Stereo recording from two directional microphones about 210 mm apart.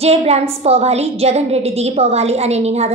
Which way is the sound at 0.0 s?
30° right (ahead or behind).